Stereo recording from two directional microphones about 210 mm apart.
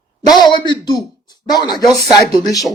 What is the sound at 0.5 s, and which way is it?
Speech, 20° left (ahead or behind).